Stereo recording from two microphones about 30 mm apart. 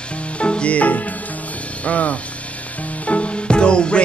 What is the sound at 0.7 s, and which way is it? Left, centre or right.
Music, left.